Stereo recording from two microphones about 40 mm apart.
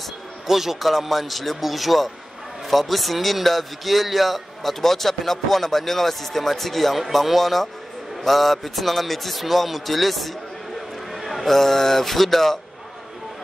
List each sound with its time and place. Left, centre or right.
0.5 s a man's voice: centre